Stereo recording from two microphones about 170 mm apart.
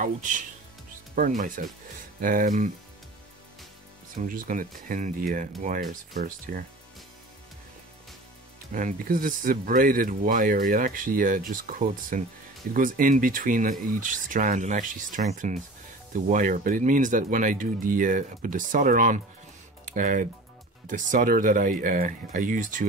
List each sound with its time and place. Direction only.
0.0 s speech: 50° right (ahead or behind)
4.2 s speech: 50° right (ahead or behind)
8.7 s speech: 55° right (ahead or behind)